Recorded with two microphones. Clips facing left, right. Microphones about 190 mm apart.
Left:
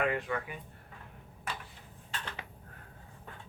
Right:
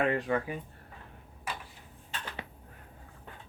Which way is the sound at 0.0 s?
30° right (ahead or behind).